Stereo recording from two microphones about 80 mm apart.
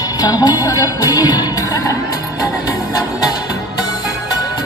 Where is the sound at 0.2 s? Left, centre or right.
Left.